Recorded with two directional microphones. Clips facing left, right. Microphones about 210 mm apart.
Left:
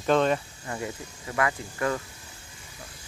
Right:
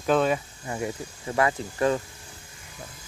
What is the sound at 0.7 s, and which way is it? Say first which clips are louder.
Speech: right 3 dB; 25° right (ahead or behind).